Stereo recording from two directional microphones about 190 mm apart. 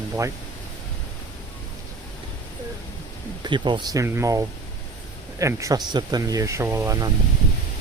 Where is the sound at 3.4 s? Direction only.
25° right (ahead or behind).